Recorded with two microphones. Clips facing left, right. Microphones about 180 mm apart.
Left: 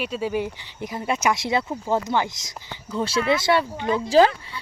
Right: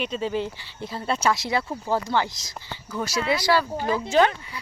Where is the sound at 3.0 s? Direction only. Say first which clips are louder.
Left 3 dB; 30° left (ahead or behind).